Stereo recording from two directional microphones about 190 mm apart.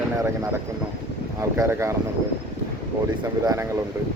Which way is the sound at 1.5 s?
15° right (ahead or behind).